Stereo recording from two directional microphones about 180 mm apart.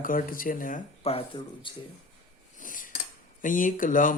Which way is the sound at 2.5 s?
50° left (ahead or behind).